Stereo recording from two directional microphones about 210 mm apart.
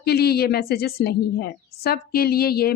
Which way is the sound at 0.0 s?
50° left (ahead or behind).